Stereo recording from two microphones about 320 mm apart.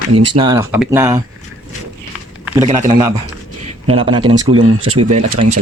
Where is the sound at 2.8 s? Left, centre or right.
Right.